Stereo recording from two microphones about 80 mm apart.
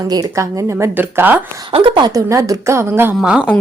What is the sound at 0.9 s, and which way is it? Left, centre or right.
Speech, right.